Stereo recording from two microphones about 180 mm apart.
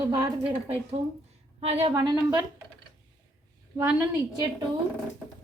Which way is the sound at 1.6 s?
35° right (ahead or behind).